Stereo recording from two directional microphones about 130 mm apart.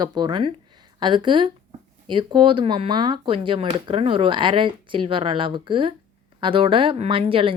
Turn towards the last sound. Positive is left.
turn(degrees=-45)  # may be behind; listen again after turning